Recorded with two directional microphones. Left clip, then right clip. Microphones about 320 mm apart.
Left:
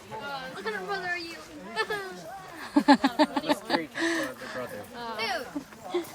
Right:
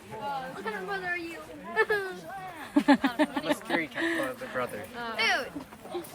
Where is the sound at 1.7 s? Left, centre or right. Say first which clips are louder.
Right 4 dB; right.